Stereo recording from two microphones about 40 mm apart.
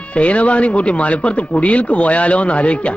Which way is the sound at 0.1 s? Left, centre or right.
Left.